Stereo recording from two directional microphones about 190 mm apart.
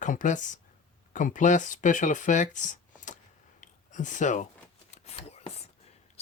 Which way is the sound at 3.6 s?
40° left (ahead or behind).